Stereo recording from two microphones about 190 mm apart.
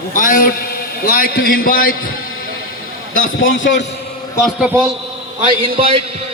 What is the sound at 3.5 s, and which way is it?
Speech, 80° left.